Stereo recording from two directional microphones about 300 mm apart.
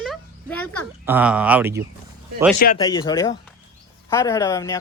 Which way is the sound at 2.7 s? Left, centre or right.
Centre.